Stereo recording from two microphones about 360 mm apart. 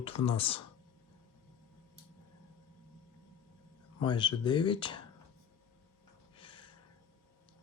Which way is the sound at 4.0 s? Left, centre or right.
Centre.